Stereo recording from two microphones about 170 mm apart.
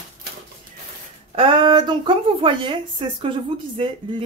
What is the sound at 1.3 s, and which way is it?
A woman's voice, 30° right (ahead or behind).